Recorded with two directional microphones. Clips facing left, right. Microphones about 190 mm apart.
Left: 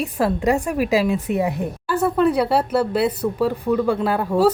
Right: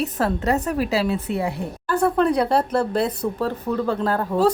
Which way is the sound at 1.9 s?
5° left (ahead or behind).